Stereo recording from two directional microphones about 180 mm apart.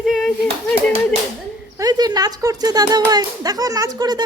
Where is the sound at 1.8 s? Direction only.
20° right (ahead or behind).